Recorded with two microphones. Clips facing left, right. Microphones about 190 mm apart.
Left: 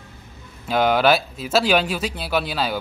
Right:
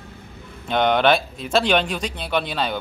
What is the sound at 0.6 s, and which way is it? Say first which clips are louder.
Speech: even; 5° left (ahead or behind).